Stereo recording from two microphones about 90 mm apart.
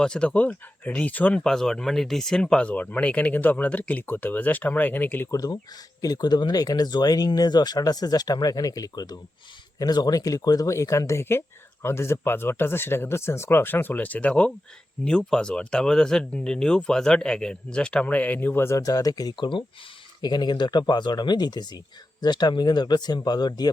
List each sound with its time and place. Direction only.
0.0 s speech: 10° left (ahead or behind)
1.5 s speech: 5° left (ahead or behind); by 5.3 s 20° left (ahead or behind)
5.3 s speech: 40° left (ahead or behind)
18.8 s speech: 40° left (ahead or behind)